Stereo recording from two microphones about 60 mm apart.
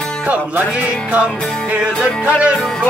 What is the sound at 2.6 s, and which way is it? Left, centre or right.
Speech, centre.